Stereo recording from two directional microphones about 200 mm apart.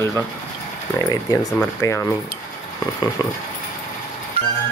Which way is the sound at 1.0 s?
15° left (ahead or behind).